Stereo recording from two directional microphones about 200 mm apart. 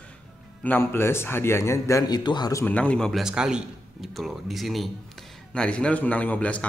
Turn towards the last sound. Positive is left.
turn(degrees=5)  # may be behind; listen again after turning